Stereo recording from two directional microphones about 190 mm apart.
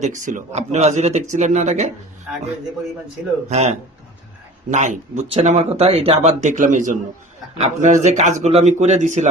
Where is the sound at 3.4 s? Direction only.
35° right (ahead or behind).